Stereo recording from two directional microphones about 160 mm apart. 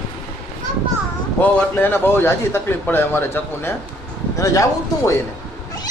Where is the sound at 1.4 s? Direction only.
10° left (ahead or behind).